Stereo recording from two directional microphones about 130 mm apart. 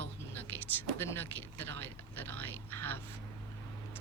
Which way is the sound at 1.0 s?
15° left (ahead or behind).